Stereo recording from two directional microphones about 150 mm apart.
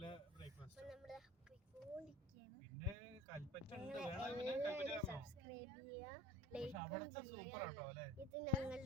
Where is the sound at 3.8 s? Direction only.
5° right (ahead or behind).